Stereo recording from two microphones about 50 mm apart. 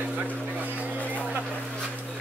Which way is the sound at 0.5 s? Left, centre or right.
Right.